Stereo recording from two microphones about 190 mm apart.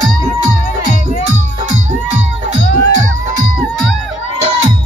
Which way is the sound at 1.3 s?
40° right (ahead or behind).